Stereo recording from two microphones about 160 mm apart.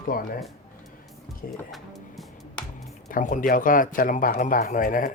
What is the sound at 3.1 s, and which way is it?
Speech, 55° left (ahead or behind).